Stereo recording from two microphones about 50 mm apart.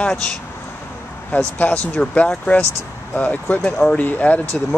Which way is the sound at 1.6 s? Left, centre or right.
Left.